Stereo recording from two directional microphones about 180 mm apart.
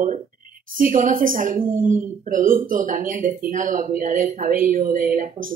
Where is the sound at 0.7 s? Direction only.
50° right (ahead or behind).